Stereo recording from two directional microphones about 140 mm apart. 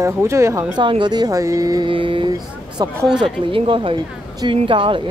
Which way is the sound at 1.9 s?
35° right (ahead or behind).